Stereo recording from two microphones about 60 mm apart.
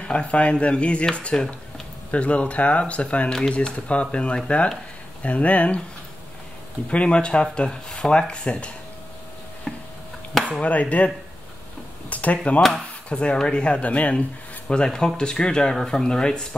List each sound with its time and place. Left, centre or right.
0.0 s speech: centre
6.9 s speech: centre
9.7 s chopping: centre
10.6 s speech: left
12.1 s speech: left